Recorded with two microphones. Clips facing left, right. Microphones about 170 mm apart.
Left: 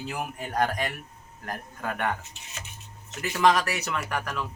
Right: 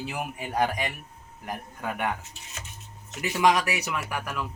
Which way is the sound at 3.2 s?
15° right (ahead or behind).